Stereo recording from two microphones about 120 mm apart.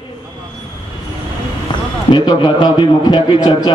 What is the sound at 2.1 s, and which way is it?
A man's voice, 40° left (ahead or behind).